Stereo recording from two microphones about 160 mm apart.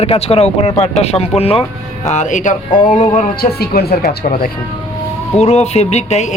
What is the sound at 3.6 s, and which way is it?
Speech, 75° left (ahead or behind).